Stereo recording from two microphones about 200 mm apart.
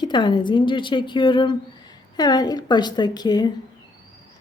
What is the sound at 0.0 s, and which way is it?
Speech, 20° left (ahead or behind).